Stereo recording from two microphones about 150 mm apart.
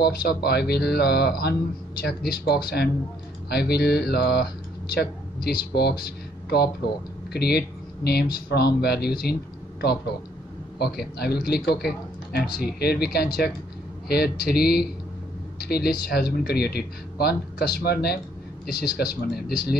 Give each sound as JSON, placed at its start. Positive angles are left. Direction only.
{"t": 0.0, "sound": "a man's voice", "side_deg": 90}